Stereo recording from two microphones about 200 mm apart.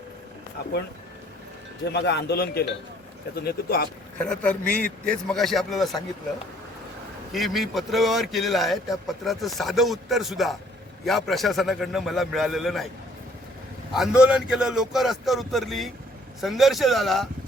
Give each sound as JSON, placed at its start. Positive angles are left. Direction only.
{"t": 1.8, "sound": "speech", "side_deg": 55}
{"t": 4.2, "sound": "a man's voice", "side_deg": 5}
{"t": 7.3, "sound": "a man's voice", "side_deg": 0}
{"t": 14.2, "sound": "a man's voice", "side_deg": -5}